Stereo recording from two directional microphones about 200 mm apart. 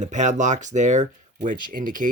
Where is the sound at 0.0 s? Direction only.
35° right (ahead or behind).